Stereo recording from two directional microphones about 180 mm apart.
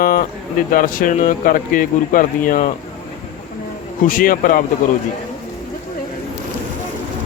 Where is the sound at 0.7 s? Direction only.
50° left (ahead or behind).